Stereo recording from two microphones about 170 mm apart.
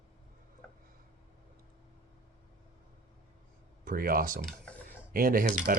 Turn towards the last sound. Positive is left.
turn(degrees=-55)  # may be behind; listen again after turning